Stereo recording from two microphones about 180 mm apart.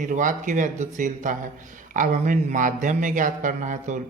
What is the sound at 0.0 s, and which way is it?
Speech, 45° right (ahead or behind).